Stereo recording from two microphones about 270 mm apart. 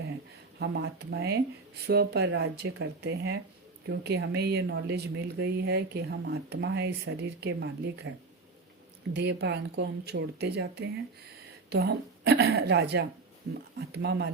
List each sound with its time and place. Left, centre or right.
0.6 s speech: right
9.1 s speech: right